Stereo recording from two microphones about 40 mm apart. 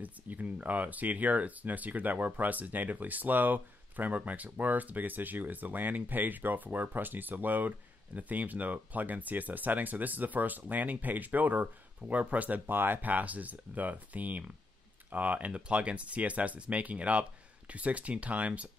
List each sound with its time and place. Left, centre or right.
0.0 s speech: right
12.6 s speech: right
13.0 s speech: right